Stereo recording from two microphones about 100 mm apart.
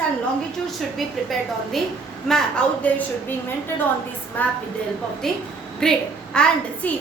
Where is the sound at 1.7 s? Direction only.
Centre (ahead or behind).